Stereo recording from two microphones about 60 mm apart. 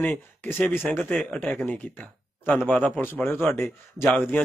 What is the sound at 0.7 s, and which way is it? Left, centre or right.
Speech, left.